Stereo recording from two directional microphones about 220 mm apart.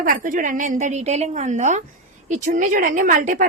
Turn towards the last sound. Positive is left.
turn(degrees=-35)  # may be behind; listen again after turning